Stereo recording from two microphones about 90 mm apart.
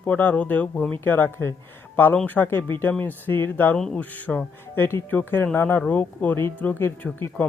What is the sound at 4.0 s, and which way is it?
Speech, 15° left (ahead or behind).